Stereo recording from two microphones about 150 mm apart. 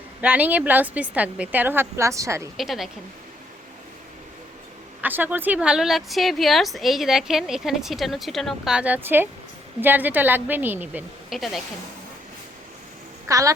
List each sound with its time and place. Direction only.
0.2 s a woman's voice: 10° right (ahead or behind)
2.6 s a woman's voice: centre (ahead or behind)
5.0 s a woman's voice: 10° right (ahead or behind)
11.3 s a woman's voice: centre (ahead or behind)
13.2 s a woman's voice: 20° right (ahead or behind)